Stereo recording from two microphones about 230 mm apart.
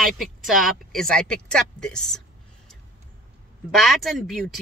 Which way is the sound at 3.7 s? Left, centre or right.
Centre.